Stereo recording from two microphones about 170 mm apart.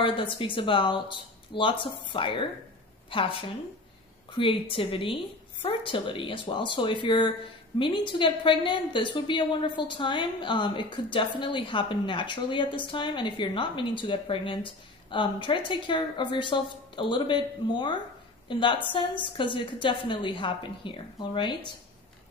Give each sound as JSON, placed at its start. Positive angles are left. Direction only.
{"t": 0.0, "sound": "a woman's voice", "side_deg": 30}